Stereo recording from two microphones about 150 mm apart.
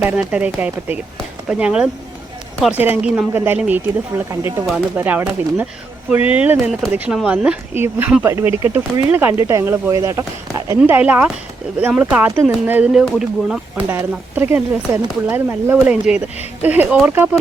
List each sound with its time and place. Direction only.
0.0 s speech: 10° right (ahead or behind)
13.8 s speech: 15° right (ahead or behind)